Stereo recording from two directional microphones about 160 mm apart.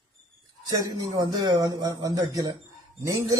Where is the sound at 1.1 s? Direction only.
25° right (ahead or behind).